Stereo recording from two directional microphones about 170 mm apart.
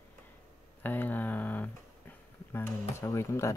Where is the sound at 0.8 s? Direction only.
10° left (ahead or behind).